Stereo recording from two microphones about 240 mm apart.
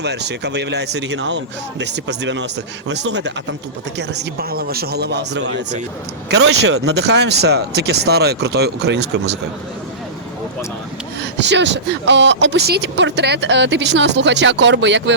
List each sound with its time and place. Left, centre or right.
0.0 s speech: right
11.3 s speech: right